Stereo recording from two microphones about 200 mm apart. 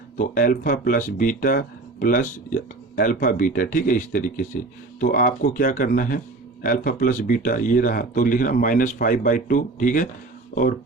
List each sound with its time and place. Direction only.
0.2 s speech: 45° left (ahead or behind)